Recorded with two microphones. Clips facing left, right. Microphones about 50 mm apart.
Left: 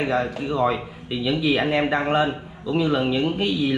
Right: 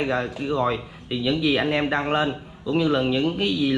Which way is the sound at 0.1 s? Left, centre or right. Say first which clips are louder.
Left 1 dB; centre.